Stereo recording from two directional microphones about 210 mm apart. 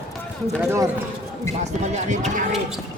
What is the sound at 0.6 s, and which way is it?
Speech, 10° right (ahead or behind).